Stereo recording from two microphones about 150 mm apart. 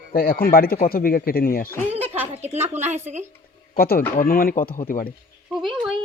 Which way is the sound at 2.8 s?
50° right (ahead or behind).